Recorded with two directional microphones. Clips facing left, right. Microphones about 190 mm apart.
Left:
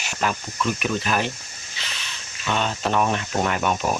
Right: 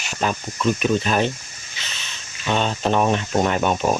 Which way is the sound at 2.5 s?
25° right (ahead or behind).